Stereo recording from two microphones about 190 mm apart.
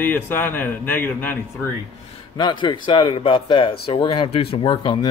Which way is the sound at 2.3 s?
25° left (ahead or behind).